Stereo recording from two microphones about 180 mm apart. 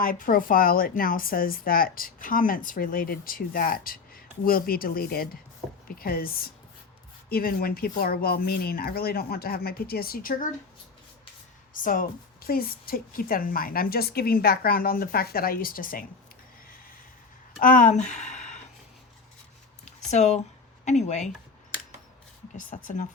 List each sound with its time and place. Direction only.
0.0 s a woman's voice: 50° left (ahead or behind)
11.7 s a woman's voice: 50° left (ahead or behind)
17.6 s speech: 50° left (ahead or behind)
19.8 s a sound: 40° left (ahead or behind)
20.8 s speech: 40° left (ahead or behind)
22.5 s speech: 45° left (ahead or behind)